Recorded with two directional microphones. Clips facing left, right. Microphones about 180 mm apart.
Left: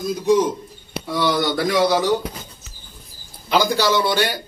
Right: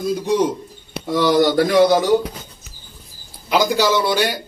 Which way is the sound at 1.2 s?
40° right (ahead or behind).